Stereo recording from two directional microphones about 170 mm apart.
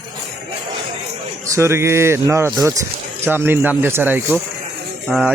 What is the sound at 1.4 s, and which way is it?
Speech, 15° right (ahead or behind).